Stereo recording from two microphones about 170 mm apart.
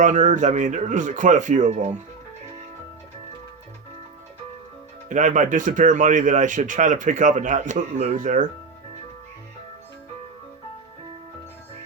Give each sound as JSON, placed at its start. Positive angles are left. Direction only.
{"t": 0.0, "sound": "speech", "side_deg": -50}
{"t": 5.0, "sound": "speech", "side_deg": -45}